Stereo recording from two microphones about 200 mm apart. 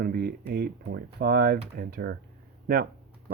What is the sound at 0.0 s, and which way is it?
Speech, 50° right (ahead or behind).